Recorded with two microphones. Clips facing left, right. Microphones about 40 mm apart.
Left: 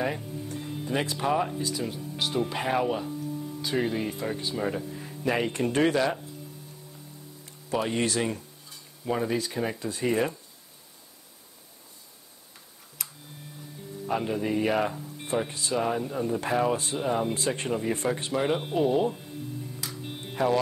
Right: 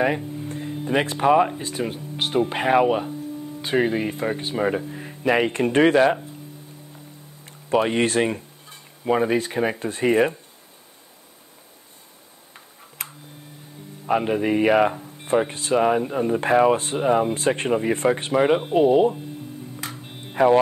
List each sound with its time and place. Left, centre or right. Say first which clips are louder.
0.5 s music: right 4 dB; right
0.8 s speech: right 8 dB; right
7.7 s speech: right 7 dB; right
13.0 s tick-tock: right 6 dB; right
14.0 s speech: right 7 dB; right
18.7 s speech: right 8 dB; right
20.0 s music: left 1 dB; centre